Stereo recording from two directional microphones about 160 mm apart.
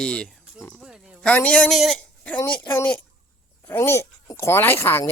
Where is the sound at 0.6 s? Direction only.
Centre (ahead or behind).